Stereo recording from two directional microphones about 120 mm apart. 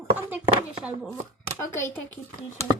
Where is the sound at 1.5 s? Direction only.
20° left (ahead or behind).